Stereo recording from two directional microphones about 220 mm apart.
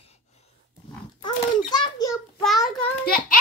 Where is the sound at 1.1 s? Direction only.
20° left (ahead or behind).